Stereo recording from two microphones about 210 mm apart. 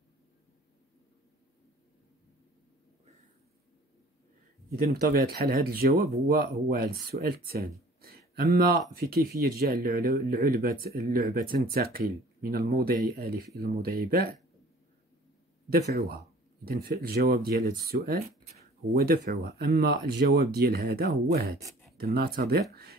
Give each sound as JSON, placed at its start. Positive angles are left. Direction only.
{"t": 4.9, "sound": "speech", "side_deg": -45}
{"t": 16.6, "sound": "speech", "side_deg": -50}